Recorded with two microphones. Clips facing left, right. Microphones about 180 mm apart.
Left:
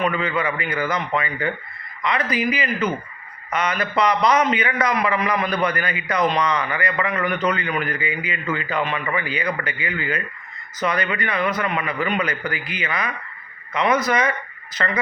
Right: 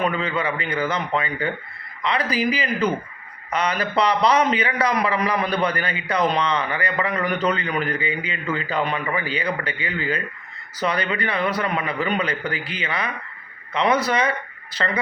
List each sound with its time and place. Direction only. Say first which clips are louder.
0.0 s a man's voice: left 1 dB; 30° right (ahead or behind)